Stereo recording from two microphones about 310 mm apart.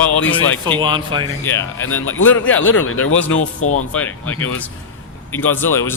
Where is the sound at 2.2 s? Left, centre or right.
Centre.